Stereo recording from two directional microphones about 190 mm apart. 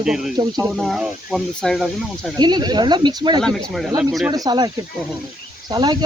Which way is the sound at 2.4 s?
20° right (ahead or behind).